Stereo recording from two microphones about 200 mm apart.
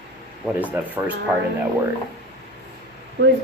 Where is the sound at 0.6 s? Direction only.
10° right (ahead or behind).